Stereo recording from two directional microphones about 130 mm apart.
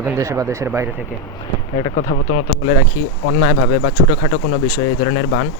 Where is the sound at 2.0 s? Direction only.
90° left.